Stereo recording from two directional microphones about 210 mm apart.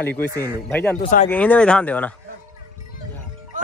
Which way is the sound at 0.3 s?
10° right (ahead or behind).